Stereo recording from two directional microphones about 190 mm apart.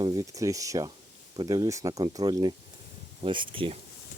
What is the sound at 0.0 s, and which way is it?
Speech, 20° right (ahead or behind).